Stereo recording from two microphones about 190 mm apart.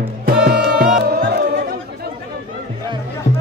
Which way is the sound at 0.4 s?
55° right (ahead or behind).